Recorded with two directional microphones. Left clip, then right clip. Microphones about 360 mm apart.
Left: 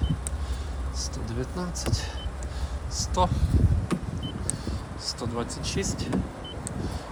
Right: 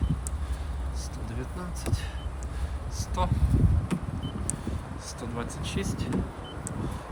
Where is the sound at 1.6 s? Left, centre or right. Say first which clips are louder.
Left 4 dB; centre.